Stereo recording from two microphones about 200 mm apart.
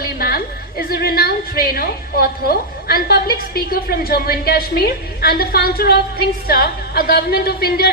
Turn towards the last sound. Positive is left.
turn(degrees=50)  # may be behind; listen again after turning